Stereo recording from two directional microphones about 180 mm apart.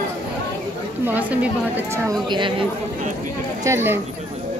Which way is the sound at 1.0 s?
10° right (ahead or behind).